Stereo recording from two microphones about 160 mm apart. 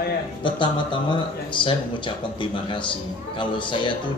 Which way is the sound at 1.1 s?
30° left (ahead or behind).